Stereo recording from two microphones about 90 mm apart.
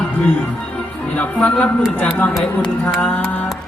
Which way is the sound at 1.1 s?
15° left (ahead or behind).